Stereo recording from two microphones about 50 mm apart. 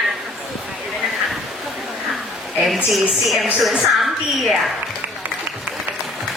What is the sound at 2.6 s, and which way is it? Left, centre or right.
A woman's voice, centre.